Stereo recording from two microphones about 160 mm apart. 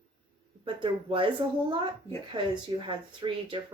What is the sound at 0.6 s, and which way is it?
Speech, 35° right (ahead or behind).